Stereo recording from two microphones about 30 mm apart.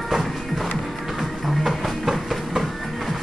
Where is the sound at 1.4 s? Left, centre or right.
Centre.